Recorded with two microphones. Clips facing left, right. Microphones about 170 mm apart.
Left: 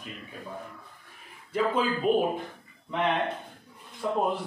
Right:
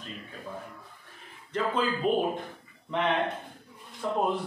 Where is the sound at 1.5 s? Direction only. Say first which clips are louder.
Left 2 dB; 10° left (ahead or behind).